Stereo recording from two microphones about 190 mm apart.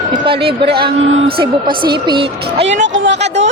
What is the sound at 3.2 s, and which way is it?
Speech, 70° right (ahead or behind).